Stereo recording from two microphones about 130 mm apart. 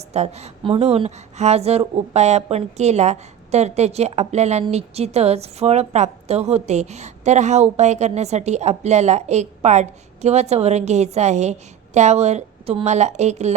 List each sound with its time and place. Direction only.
0.1 s a woman's voice: 55° right (ahead or behind)